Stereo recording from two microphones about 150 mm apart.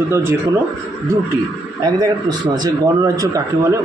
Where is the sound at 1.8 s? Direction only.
25° right (ahead or behind).